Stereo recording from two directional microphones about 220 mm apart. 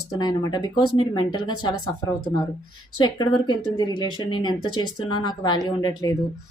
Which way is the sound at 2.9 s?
20° left (ahead or behind).